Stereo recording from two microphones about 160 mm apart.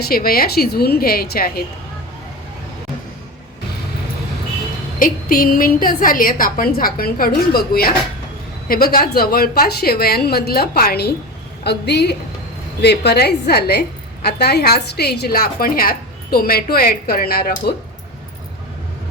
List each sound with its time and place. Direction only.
0.0 s a woman's voice: 70° left (ahead or behind)
4.9 s a woman's voice: 60° left (ahead or behind)
11.6 s a woman's voice: 90° left; by 17.7 s 75° left (ahead or behind)